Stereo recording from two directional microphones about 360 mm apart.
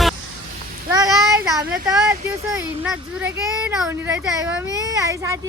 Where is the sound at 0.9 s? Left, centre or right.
Centre.